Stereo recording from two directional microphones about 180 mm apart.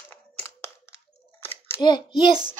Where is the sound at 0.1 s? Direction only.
10° left (ahead or behind).